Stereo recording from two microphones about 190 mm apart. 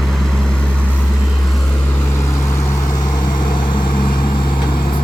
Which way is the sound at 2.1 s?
15° left (ahead or behind).